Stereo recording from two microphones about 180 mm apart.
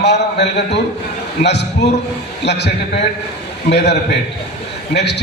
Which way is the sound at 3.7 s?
70° left (ahead or behind).